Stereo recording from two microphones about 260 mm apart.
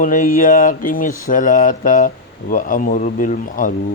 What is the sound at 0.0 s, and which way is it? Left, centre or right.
Speech, left.